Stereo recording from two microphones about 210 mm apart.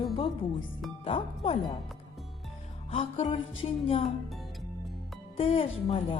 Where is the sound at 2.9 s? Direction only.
30° left (ahead or behind).